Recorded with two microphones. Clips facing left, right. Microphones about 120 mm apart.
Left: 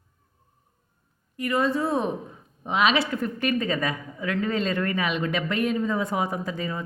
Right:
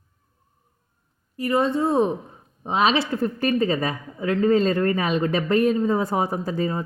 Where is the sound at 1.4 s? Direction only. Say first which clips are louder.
Right 3 dB; 30° right (ahead or behind).